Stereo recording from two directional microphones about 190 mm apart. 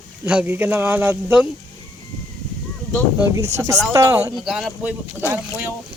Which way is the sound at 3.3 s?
15° right (ahead or behind).